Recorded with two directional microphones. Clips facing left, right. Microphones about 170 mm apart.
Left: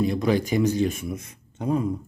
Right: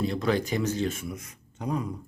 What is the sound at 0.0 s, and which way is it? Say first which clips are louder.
Speech: left 4 dB; 15° left (ahead or behind).